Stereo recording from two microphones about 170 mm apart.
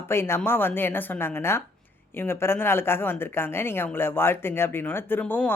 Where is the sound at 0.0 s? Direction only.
15° left (ahead or behind).